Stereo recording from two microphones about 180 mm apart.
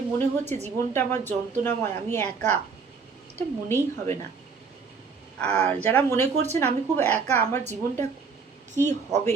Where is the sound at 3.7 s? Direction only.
40° right (ahead or behind).